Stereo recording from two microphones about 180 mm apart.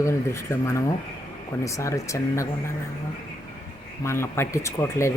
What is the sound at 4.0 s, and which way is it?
Speech, 15° left (ahead or behind).